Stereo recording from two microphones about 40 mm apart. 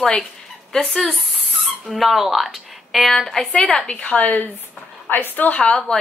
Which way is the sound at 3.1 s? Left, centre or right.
Centre.